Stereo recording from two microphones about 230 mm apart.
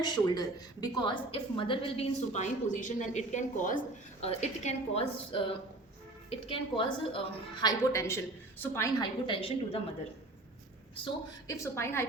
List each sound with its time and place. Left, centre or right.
0.0 s a woman's voice: centre
10.9 s a woman's voice: left
11.5 s a woman's voice: centre